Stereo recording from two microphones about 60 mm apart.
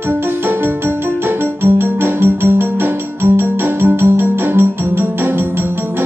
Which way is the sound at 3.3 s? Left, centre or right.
Right.